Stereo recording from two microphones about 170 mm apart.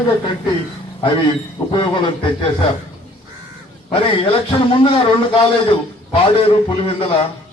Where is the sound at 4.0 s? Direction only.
30° left (ahead or behind).